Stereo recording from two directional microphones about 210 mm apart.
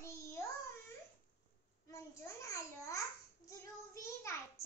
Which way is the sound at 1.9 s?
15° left (ahead or behind).